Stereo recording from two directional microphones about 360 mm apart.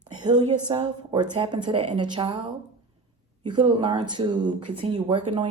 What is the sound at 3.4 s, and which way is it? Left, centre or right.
Speech, centre.